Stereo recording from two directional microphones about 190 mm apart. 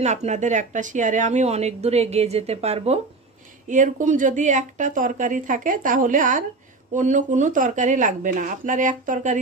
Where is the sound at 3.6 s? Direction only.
45° right (ahead or behind).